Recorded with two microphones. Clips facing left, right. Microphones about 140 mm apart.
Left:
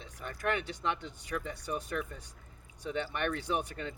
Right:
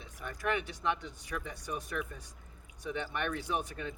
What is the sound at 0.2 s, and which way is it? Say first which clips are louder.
Speech: left 1 dB; 10° right (ahead or behind).